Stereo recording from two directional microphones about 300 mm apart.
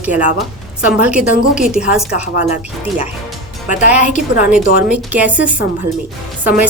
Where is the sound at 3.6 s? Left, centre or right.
Left.